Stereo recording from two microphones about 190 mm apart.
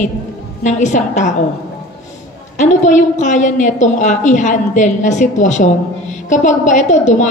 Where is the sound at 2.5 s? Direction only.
40° left (ahead or behind).